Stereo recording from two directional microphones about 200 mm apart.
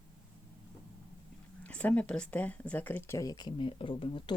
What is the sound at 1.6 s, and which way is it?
Speech, 5° left (ahead or behind).